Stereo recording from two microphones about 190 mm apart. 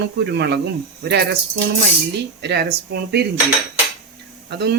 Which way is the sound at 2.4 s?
60° right (ahead or behind).